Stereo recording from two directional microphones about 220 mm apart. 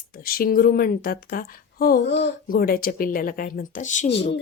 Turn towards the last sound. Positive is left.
turn(degrees=35)  # may be behind; listen again after turning